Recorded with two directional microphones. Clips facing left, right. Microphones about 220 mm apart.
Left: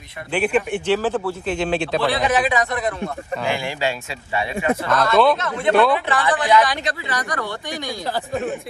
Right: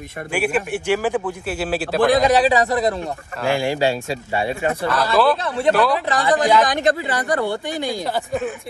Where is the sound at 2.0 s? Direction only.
45° right (ahead or behind).